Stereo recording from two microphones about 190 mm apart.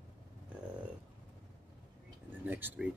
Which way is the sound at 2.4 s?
10° right (ahead or behind).